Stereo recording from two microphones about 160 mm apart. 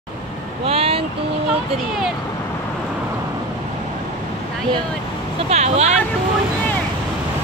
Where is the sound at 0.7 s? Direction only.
40° right (ahead or behind).